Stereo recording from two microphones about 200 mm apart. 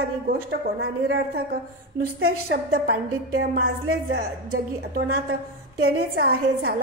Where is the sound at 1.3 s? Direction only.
45° right (ahead or behind).